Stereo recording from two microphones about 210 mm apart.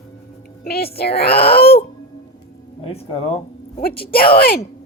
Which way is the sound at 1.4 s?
45° left (ahead or behind).